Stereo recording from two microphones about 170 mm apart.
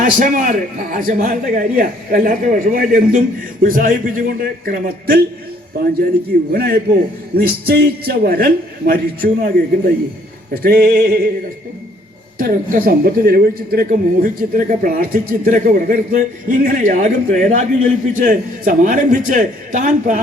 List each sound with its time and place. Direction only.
0.0 s a man's voice: 50° right (ahead or behind)
6.5 s a man's voice: 60° right (ahead or behind)
12.4 s a man's voice: 55° right (ahead or behind)